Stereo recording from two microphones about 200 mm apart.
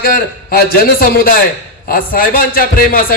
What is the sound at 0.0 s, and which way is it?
A man's voice, 50° left (ahead or behind).